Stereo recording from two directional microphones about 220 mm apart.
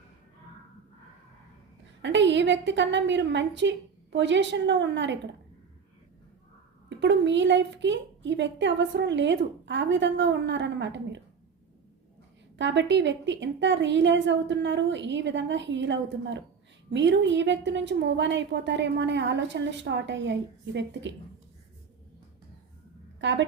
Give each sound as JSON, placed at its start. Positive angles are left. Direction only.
{"t": 2.0, "sound": "a woman's voice", "side_deg": -55}
{"t": 7.0, "sound": "a woman's voice", "side_deg": -55}
{"t": 12.5, "sound": "a woman's voice", "side_deg": -55}
{"t": 23.2, "sound": "a woman's voice", "side_deg": -55}